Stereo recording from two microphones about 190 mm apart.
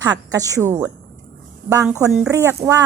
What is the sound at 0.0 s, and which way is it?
Speech, 20° right (ahead or behind).